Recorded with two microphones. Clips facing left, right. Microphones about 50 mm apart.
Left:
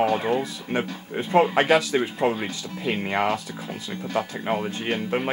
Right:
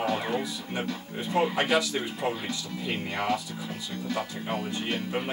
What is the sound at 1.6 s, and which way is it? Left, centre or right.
Speech, left.